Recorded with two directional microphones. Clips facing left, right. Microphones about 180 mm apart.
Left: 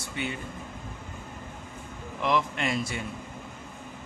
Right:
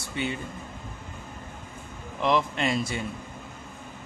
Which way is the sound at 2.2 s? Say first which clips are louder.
Right 2 dB; 30° right (ahead or behind).